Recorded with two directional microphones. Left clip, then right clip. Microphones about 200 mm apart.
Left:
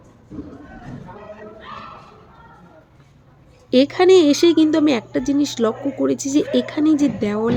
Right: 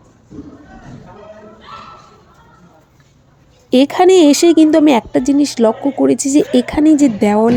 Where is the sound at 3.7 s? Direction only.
35° right (ahead or behind).